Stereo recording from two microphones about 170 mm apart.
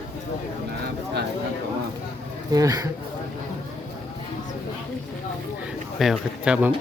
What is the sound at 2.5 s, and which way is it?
Speech, 20° right (ahead or behind).